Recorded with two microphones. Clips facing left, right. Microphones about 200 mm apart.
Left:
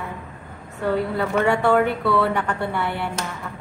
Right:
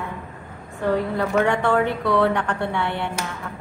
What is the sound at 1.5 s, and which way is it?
A woman's voice, 10° left (ahead or behind).